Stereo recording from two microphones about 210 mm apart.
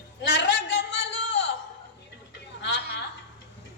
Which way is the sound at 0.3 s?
55° left (ahead or behind).